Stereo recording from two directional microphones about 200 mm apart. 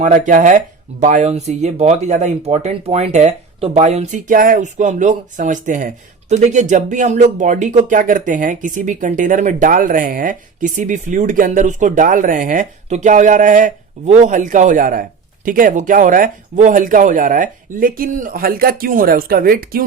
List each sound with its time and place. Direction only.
0.0 s speech: 40° right (ahead or behind)